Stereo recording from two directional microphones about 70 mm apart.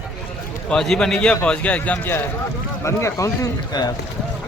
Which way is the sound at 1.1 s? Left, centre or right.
Centre.